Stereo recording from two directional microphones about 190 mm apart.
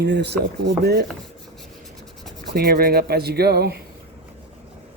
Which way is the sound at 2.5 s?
55° right (ahead or behind).